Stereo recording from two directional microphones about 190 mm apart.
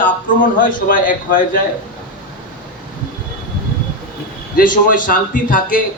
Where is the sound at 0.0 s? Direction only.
45° left (ahead or behind).